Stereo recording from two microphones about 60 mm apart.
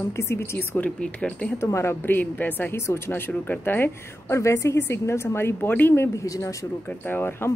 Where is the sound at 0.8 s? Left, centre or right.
Centre.